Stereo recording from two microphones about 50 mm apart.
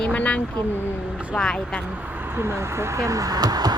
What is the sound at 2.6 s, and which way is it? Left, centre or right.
Speech, right.